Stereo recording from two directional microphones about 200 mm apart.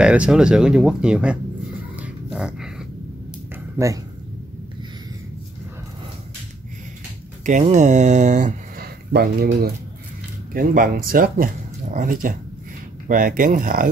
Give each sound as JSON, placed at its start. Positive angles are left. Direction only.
{"t": 0.0, "sound": "speech", "side_deg": -5}
{"t": 2.3, "sound": "dog", "side_deg": -5}
{"t": 3.7, "sound": "speech", "side_deg": -15}
{"t": 7.4, "sound": "speech", "side_deg": -40}